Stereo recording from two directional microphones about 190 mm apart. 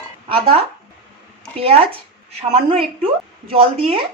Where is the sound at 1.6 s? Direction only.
30° right (ahead or behind).